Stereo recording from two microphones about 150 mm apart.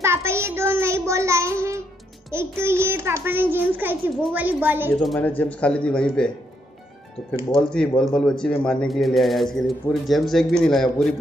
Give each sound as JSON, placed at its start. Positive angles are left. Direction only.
{"t": 0.0, "sound": "child singing", "side_deg": -15}
{"t": 2.3, "sound": "a child's voice", "side_deg": -15}
{"t": 5.2, "sound": "speech", "side_deg": 10}
{"t": 7.5, "sound": "a man's voice", "side_deg": 5}